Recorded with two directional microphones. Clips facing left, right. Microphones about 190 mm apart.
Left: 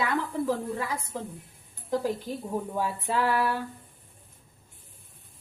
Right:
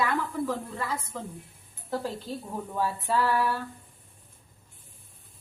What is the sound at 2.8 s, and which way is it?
Speech, 15° left (ahead or behind).